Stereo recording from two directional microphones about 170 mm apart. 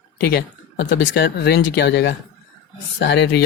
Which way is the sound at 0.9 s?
65° left (ahead or behind).